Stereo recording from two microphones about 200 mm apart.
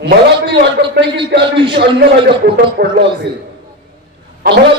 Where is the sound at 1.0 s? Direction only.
25° right (ahead or behind).